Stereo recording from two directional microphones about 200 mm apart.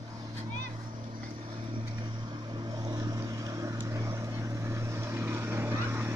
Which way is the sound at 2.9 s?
20° right (ahead or behind).